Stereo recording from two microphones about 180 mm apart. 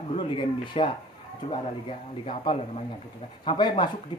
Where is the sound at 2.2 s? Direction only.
30° left (ahead or behind).